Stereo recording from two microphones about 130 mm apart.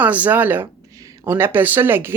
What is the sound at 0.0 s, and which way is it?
Speech, 10° right (ahead or behind).